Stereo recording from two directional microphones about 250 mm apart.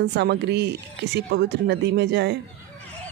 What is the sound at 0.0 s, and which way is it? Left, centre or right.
Speech, right.